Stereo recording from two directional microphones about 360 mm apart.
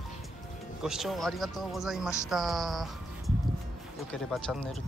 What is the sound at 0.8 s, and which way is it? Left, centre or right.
Speech, centre.